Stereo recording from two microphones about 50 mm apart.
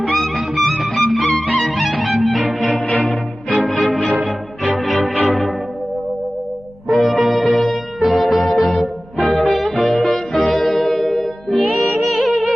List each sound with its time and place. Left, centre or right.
0.0 s music: centre
6.8 s music: centre